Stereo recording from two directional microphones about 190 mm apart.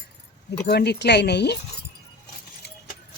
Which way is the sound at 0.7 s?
60° left (ahead or behind).